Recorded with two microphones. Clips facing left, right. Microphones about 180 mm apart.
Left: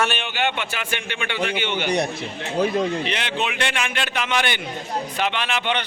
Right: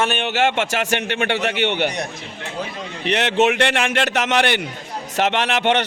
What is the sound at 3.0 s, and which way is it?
A man's voice, 70° right (ahead or behind).